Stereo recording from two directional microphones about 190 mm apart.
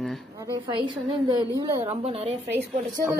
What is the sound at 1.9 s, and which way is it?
Speech, 30° right (ahead or behind).